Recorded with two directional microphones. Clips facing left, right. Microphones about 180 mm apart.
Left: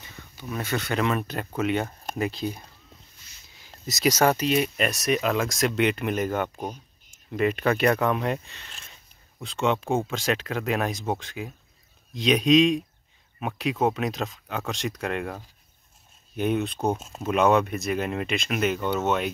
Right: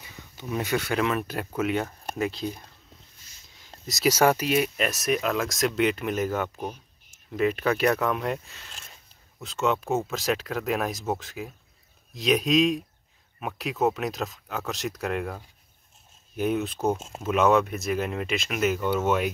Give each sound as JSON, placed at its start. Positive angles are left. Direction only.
{"t": 0.4, "sound": "speech", "side_deg": -15}
{"t": 3.5, "sound": "speech", "side_deg": 5}